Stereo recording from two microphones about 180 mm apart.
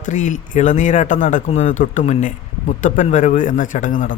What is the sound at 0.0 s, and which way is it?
Speech, 45° left (ahead or behind).